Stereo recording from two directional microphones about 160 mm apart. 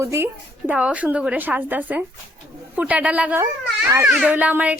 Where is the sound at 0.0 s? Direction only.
15° right (ahead or behind).